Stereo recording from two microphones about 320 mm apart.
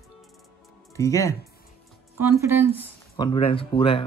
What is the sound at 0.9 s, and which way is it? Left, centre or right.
Speech, centre.